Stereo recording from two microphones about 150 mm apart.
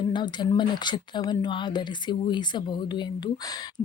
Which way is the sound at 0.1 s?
30° left (ahead or behind).